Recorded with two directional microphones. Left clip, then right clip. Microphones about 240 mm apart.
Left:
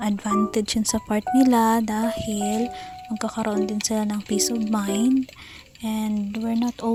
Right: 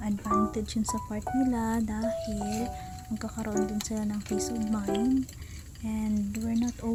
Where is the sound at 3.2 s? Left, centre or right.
Left.